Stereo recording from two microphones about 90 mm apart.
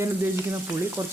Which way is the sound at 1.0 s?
15° right (ahead or behind).